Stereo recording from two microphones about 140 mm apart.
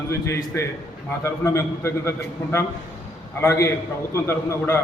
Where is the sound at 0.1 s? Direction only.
20° left (ahead or behind).